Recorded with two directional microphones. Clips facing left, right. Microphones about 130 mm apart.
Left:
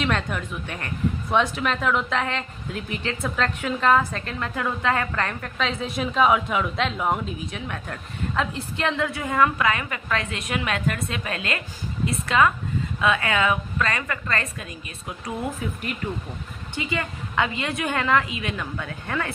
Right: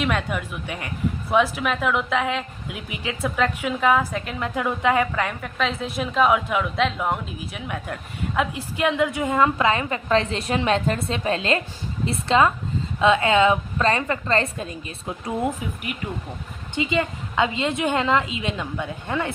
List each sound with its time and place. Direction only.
0.0 s a woman's voice: 5° right (ahead or behind); by 15.4 s 25° right (ahead or behind)
15.9 s a woman's voice: 10° right (ahead or behind)